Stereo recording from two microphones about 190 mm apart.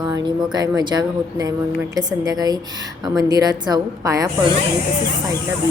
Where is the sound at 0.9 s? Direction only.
20° right (ahead or behind).